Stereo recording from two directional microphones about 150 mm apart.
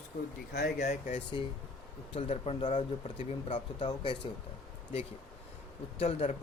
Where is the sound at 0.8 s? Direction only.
50° left (ahead or behind).